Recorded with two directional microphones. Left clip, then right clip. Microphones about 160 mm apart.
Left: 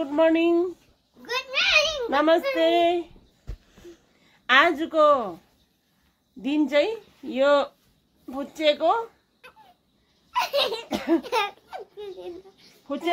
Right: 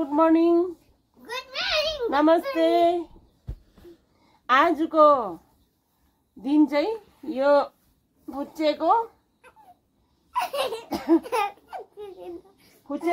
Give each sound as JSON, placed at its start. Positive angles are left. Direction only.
{"t": 0.0, "sound": "speech", "side_deg": -5}
{"t": 1.2, "sound": "a sound", "side_deg": 25}
{"t": 2.0, "sound": "speech", "side_deg": -10}
{"t": 4.5, "sound": "a woman's voice", "side_deg": -5}
{"t": 6.4, "sound": "speech", "side_deg": 0}
{"t": 10.3, "sound": "belly laugh", "side_deg": -5}